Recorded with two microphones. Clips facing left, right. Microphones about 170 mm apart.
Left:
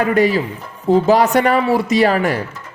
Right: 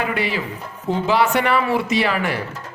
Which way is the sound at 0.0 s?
40° left (ahead or behind).